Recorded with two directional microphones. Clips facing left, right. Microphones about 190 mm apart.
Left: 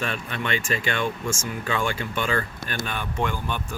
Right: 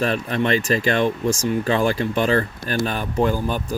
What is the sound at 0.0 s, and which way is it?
Speech, 35° right (ahead or behind).